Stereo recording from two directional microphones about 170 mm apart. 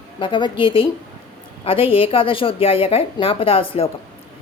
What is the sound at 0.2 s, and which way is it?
A woman's voice, 30° left (ahead or behind).